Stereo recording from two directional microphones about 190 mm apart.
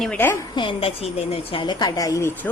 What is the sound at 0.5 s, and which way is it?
A woman's voice, 25° left (ahead or behind).